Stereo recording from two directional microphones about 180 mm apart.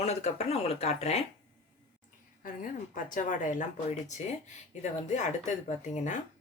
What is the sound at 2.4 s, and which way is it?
A woman's voice, 50° left (ahead or behind).